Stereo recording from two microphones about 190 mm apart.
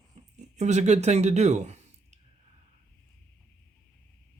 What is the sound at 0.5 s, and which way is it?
Speech, 40° right (ahead or behind).